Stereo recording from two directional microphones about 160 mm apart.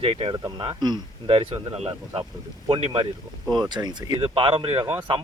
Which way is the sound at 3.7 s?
25° right (ahead or behind).